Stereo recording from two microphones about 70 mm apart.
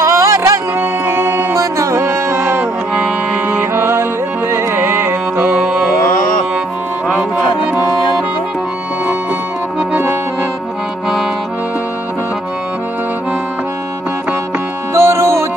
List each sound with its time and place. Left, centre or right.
0.0 s music: right
0.7 s music: right
1.6 s music: right
5.5 s music: centre
9.8 s accordion: right
15.0 s music: right